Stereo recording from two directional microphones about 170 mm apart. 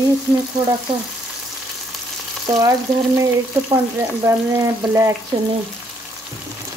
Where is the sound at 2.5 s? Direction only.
20° right (ahead or behind).